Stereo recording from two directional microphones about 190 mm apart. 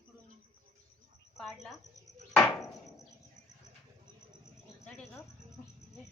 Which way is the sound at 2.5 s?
Centre (ahead or behind).